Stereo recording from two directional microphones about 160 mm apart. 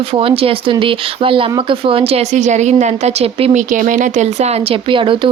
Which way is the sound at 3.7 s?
55° right (ahead or behind).